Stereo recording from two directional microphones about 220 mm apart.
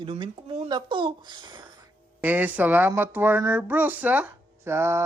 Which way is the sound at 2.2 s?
10° right (ahead or behind).